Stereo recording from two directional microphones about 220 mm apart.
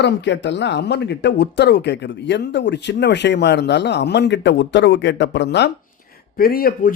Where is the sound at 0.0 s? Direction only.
55° left (ahead or behind).